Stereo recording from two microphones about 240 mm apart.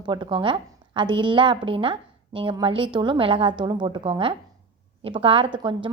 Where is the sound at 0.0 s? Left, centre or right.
Centre.